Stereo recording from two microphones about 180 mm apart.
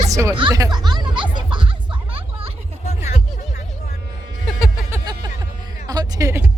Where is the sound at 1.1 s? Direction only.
25° right (ahead or behind).